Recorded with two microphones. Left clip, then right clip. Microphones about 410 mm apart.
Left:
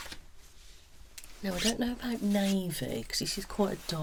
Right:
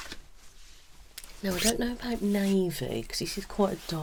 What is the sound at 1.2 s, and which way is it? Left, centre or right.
Speech, right.